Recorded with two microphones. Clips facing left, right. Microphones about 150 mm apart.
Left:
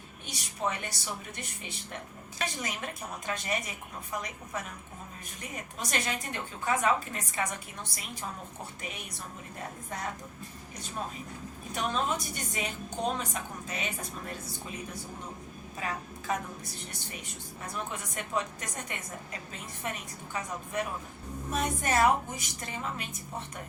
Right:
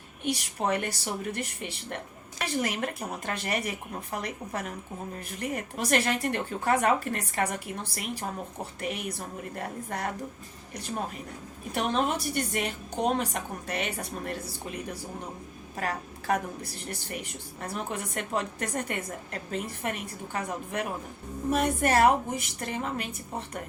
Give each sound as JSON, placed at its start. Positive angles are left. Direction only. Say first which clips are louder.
{"t": 0.3, "sound": "speech", "louder": "right 6 dB", "side_deg": -60}
{"t": 11.7, "sound": "speech", "louder": "right 4 dB", "side_deg": -60}
{"t": 16.3, "sound": "speech", "louder": "right 5 dB", "side_deg": -60}
{"t": 17.9, "sound": "speech", "louder": "right 2 dB", "side_deg": -60}